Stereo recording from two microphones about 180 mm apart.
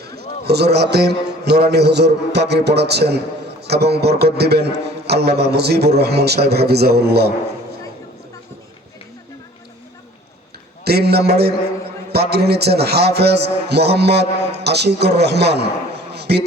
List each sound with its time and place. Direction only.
0.0 s a man's voice: 65° right (ahead or behind)
10.8 s a man's voice: 65° right (ahead or behind)